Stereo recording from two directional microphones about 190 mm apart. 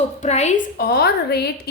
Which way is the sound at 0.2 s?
35° left (ahead or behind).